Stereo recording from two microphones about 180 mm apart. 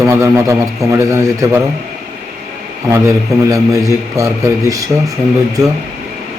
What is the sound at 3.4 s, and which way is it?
Speech, 20° right (ahead or behind).